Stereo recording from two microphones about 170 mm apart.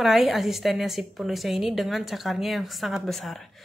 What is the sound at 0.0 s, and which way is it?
A woman's voice, centre (ahead or behind).